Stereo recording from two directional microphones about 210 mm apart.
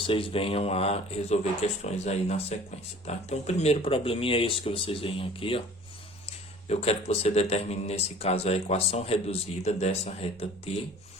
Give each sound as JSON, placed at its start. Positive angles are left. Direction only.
{"t": 0.0, "sound": "a man's voice", "side_deg": 25}
{"t": 6.7, "sound": "a man's voice", "side_deg": 30}